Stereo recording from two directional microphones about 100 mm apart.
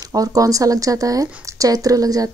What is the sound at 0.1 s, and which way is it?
Speech, 35° right (ahead or behind).